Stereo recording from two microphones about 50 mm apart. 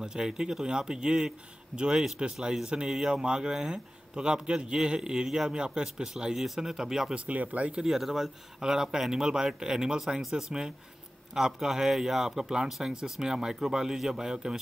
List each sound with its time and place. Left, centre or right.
0.0 s a man's voice: centre
7.2 s speech: right
7.8 s a man's voice: centre